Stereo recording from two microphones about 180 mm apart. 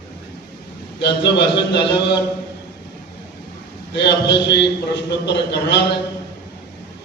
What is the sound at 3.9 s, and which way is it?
A man's voice, 70° left (ahead or behind).